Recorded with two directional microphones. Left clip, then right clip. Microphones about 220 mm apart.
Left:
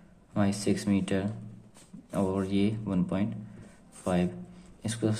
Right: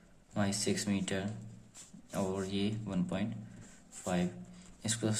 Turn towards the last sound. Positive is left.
turn(degrees=5)  # may be behind; listen again after turning